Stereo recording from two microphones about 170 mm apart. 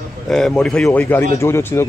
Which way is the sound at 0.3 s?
Centre (ahead or behind).